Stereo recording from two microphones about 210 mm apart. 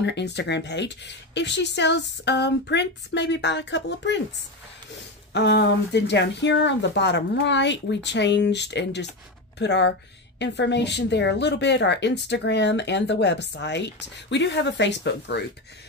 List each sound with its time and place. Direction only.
0.0 s speech: 55° left (ahead or behind)
5.3 s speech: 55° left (ahead or behind)